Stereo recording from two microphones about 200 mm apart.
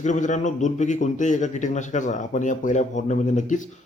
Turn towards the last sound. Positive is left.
turn(degrees=40)  # may be behind; listen again after turning